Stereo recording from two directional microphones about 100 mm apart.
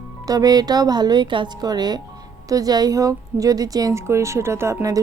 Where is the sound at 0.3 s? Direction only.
40° right (ahead or behind).